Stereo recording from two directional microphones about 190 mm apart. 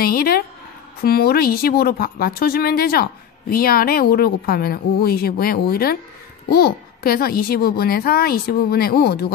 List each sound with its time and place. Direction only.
0.0 s speech: 55° left (ahead or behind)